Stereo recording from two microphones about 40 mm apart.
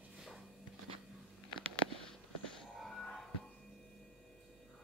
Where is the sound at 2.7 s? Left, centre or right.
Centre.